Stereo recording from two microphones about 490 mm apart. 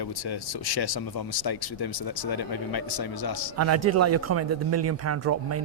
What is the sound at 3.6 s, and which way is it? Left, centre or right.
Speech, right.